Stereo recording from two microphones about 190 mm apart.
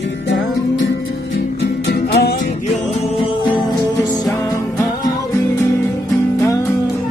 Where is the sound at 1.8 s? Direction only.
60° left (ahead or behind).